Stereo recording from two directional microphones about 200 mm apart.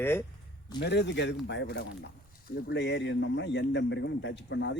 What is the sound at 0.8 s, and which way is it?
A man's voice, 55° left (ahead or behind).